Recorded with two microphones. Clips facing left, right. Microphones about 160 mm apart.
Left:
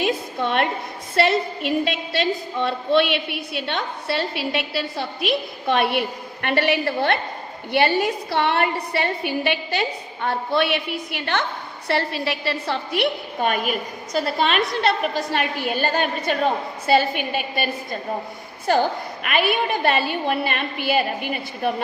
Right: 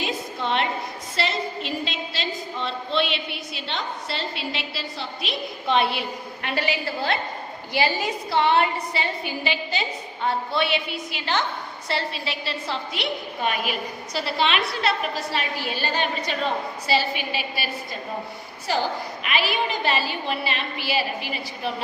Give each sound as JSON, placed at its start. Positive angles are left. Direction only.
{"t": 0.0, "sound": "a sound", "side_deg": 55}
{"t": 1.1, "sound": "a woman's voice", "side_deg": 60}
{"t": 18.7, "sound": "a woman's voice", "side_deg": 50}